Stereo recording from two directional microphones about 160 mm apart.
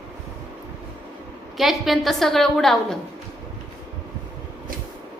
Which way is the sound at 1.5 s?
Centre (ahead or behind).